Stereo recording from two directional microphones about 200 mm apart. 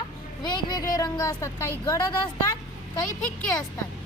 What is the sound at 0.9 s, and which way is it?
A woman's voice, 15° left (ahead or behind).